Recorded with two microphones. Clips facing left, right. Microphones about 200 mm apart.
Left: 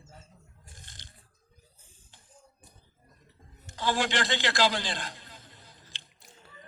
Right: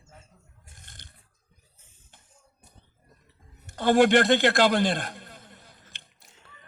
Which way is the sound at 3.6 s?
60° right (ahead or behind).